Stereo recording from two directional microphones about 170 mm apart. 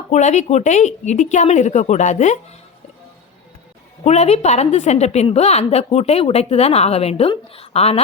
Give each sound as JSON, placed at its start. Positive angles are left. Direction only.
{"t": 0.1, "sound": "a woman's voice", "side_deg": 45}
{"t": 4.0, "sound": "a woman's voice", "side_deg": 40}